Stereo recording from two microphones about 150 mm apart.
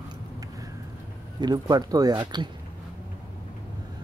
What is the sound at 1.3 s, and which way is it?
Speech, 25° right (ahead or behind).